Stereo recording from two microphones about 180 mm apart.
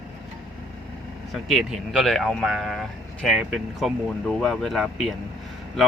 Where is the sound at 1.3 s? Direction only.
Centre (ahead or behind).